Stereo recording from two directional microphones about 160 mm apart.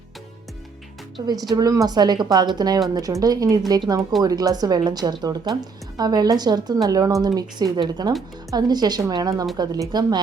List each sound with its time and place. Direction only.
1.3 s speech: 25° right (ahead or behind)